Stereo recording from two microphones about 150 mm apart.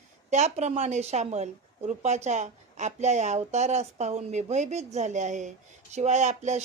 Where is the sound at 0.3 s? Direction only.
50° right (ahead or behind).